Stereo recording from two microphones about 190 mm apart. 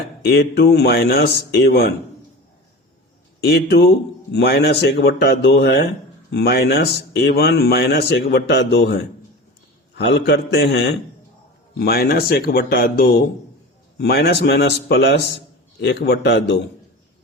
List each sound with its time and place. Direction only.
0.2 s speech: 60° left (ahead or behind)
3.4 s speech: 60° left (ahead or behind)